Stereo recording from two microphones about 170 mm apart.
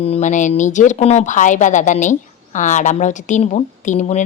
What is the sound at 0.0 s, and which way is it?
Speech, 40° left (ahead or behind).